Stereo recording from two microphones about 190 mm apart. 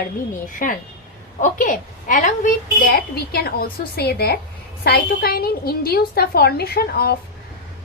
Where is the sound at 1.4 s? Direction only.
45° left (ahead or behind).